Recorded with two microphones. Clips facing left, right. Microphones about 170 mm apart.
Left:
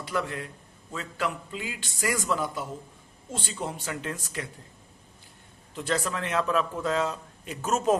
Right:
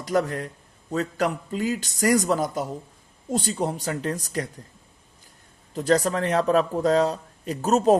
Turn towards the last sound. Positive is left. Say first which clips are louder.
# right 6 dB
turn(degrees=-35)  # may be behind; listen again after turning